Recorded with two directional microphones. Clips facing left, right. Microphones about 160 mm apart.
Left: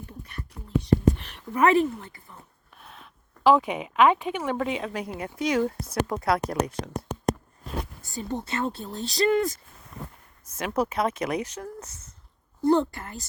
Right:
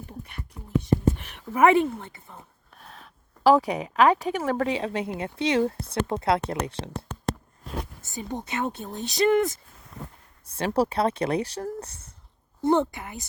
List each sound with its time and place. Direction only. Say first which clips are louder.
0.9 s speech: left 3 dB; 20° right (ahead or behind)
2.8 s speech: right 1 dB; 40° right (ahead or behind)
8.0 s speech: left 1 dB; 15° right (ahead or behind)
10.5 s speech: right 3 dB; 30° right (ahead or behind)
12.6 s speech: left 1 dB; 20° right (ahead or behind)